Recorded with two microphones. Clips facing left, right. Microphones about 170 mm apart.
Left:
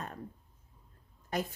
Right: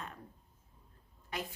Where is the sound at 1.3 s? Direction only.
40° left (ahead or behind).